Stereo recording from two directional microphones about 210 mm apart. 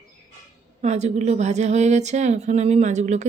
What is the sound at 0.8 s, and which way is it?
Speech, 30° right (ahead or behind).